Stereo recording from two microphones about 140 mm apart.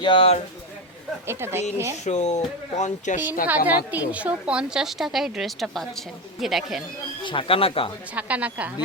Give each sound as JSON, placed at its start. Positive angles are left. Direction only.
{"t": 0.0, "sound": "speech", "side_deg": 40}
{"t": 1.3, "sound": "a woman's voice", "side_deg": -15}
{"t": 2.0, "sound": "speech", "side_deg": 55}
{"t": 3.7, "sound": "a woman's voice", "side_deg": -10}
{"t": 7.2, "sound": "speech", "side_deg": 35}
{"t": 8.1, "sound": "a woman's voice", "side_deg": -10}